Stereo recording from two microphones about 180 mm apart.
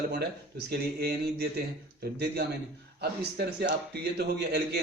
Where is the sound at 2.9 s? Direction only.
60° right (ahead or behind).